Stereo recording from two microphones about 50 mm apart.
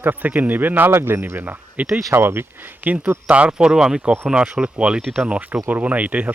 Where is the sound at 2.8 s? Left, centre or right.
Right.